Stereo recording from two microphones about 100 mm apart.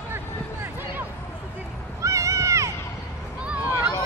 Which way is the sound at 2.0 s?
30° right (ahead or behind).